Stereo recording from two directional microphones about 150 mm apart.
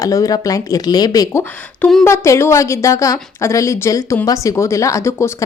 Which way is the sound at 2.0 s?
20° left (ahead or behind).